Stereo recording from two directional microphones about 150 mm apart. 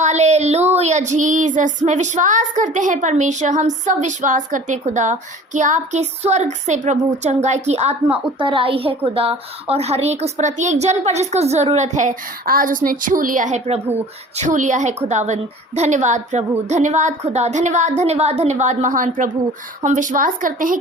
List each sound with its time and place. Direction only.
0.0 s child singing: 50° right (ahead or behind)
8.0 s a woman's voice: 35° right (ahead or behind)
9.1 s child singing: 40° right (ahead or behind); by 19.4 s 60° right (ahead or behind)
19.8 s speech: 55° right (ahead or behind)